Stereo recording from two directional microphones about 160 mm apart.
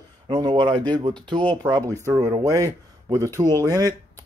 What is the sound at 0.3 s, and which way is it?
Speech, 25° right (ahead or behind).